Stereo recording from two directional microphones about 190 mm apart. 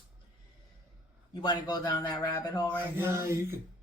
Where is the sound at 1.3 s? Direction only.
25° left (ahead or behind).